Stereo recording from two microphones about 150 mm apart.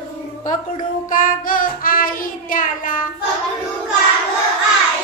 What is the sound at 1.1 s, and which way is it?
Child singing, 65° left (ahead or behind).